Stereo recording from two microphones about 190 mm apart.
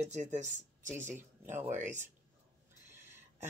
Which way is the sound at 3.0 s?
10° right (ahead or behind).